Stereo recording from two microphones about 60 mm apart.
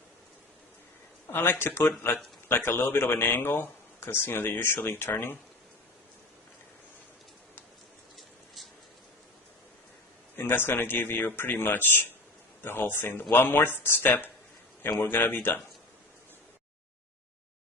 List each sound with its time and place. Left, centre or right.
1.3 s speech: left
10.3 s speech: left